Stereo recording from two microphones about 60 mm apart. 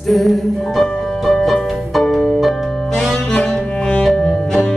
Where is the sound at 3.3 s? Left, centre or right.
Centre.